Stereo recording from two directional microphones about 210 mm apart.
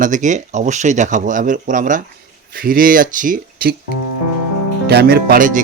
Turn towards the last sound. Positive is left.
turn(degrees=-40)  # may be behind; listen again after turning